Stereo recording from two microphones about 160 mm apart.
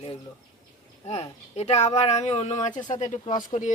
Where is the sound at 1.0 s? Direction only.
40° left (ahead or behind).